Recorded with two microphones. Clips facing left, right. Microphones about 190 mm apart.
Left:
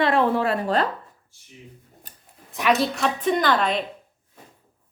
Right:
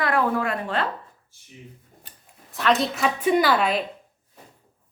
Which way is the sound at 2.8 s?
5° right (ahead or behind).